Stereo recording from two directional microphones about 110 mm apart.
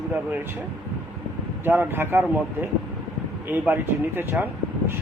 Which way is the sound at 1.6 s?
20° right (ahead or behind).